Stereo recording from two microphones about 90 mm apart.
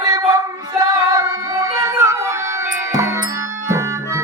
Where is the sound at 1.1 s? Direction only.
35° right (ahead or behind).